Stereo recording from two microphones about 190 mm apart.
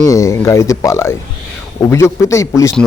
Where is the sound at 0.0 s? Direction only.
15° left (ahead or behind).